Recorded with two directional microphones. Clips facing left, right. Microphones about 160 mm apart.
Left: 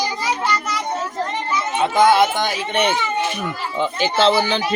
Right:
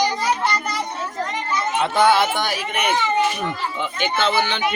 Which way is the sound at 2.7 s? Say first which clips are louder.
Even; 30° left (ahead or behind).